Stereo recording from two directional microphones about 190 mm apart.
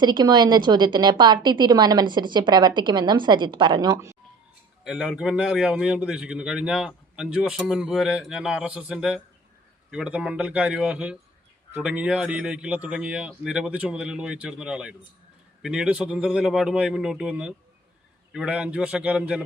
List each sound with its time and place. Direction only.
0.0 s a woman's voice: 25° right (ahead or behind)
4.8 s speech: 5° right (ahead or behind)